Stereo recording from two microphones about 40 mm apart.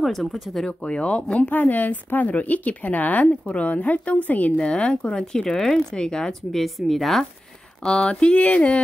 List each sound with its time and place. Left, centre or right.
0.0 s a woman's voice: centre
0.7 s speech: left
1.5 s speech: left
3.3 s a woman's voice: left
4.6 s speech: left
5.2 s speech: centre
6.5 s a woman's voice: centre
7.8 s speech: centre
8.1 s a woman's voice: left